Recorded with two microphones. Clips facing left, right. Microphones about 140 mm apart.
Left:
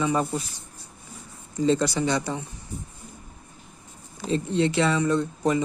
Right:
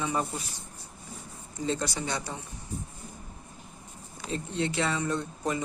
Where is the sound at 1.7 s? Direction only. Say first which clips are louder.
Left 8 dB; 85° left.